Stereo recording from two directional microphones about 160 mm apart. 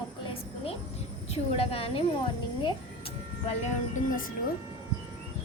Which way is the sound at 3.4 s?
45° left (ahead or behind).